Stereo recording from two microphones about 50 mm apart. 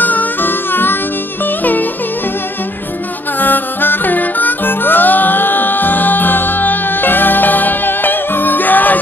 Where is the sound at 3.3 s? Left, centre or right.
Left.